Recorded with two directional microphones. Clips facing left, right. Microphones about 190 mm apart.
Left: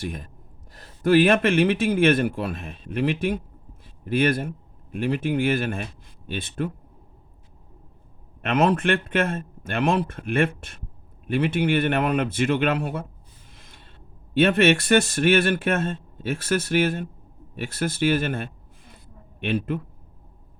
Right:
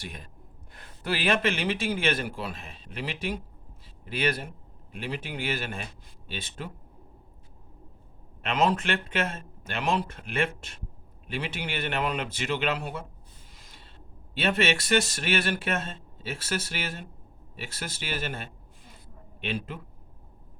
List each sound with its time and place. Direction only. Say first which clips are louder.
0.0 s speech: left 9 dB; 50° left (ahead or behind)
8.4 s speech: left 5 dB; 55° left (ahead or behind)
13.5 s a sound: left 4 dB; 55° left (ahead or behind)
14.3 s a man's voice: left 8 dB; 55° left (ahead or behind)